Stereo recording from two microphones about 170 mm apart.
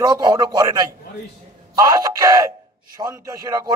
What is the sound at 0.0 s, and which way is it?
A man's voice, 25° right (ahead or behind).